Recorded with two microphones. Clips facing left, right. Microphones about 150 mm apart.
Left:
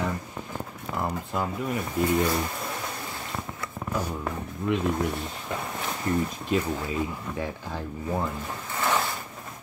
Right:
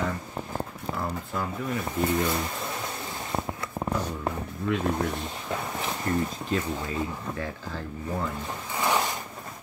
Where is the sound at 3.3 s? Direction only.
25° right (ahead or behind).